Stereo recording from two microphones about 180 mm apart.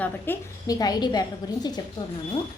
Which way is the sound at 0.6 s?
20° left (ahead or behind).